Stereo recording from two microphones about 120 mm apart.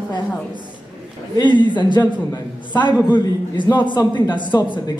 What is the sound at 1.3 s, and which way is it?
A man's voice, 40° left (ahead or behind).